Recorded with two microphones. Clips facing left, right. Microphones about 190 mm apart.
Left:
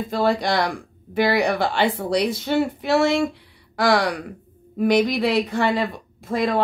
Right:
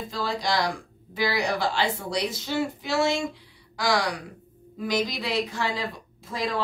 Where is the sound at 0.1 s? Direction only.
60° left (ahead or behind).